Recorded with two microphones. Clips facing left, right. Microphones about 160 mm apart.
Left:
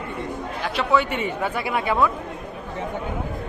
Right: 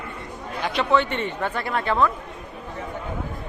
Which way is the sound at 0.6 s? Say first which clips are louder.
Even; 5° left (ahead or behind).